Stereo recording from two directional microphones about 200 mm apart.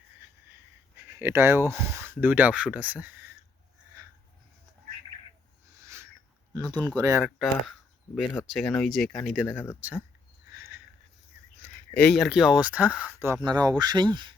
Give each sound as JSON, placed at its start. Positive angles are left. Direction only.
{"t": 0.9, "sound": "speech", "side_deg": -10}
{"t": 5.8, "sound": "a sound", "side_deg": -15}
{"t": 6.7, "sound": "speech", "side_deg": -20}
{"t": 7.3, "sound": "speech", "side_deg": 0}
{"t": 10.5, "sound": "a sound", "side_deg": -15}
{"t": 12.1, "sound": "speech", "side_deg": 0}